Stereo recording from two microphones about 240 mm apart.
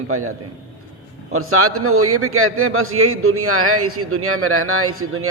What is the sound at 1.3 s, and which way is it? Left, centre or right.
A man's voice, right.